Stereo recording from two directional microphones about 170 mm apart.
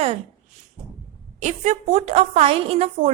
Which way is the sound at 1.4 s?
45° right (ahead or behind).